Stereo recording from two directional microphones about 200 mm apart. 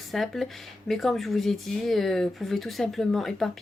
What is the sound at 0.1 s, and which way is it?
Speech, centre (ahead or behind).